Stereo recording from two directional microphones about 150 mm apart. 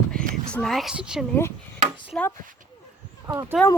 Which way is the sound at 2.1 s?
5° left (ahead or behind).